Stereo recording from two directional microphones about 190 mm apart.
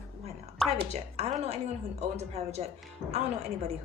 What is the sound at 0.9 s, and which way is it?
Speech, 35° right (ahead or behind).